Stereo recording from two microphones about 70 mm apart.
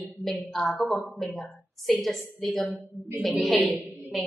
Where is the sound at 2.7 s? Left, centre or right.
Right.